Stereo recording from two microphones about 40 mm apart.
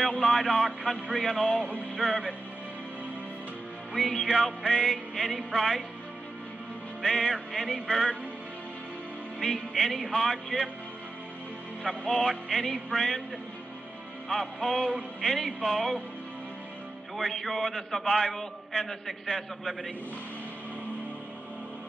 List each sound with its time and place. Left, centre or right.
0.2 s a man's voice: centre
1.5 s music: left
2.0 s music: centre
3.9 s a man's voice: centre
4.5 s music: left
5.6 s a man's voice: centre
7.0 s a man's voice: centre
9.4 s a man's voice: centre
11.8 s a man's voice: centre
14.3 s a man's voice: centre
17.2 s a man's voice: centre